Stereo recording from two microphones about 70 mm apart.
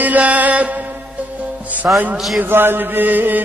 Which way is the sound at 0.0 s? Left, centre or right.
Right.